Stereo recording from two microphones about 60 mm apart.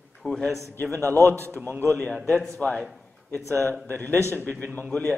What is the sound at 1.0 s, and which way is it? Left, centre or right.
Mantra, left.